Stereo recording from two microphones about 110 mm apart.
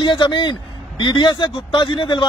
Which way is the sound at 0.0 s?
45° left (ahead or behind).